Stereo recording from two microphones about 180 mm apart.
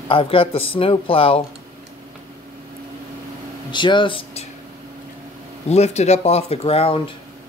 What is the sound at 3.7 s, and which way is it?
Speech, 25° left (ahead or behind).